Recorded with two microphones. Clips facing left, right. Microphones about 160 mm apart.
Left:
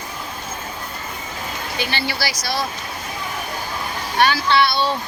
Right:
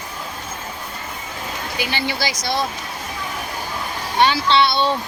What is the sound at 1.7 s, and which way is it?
Speech, 15° right (ahead or behind).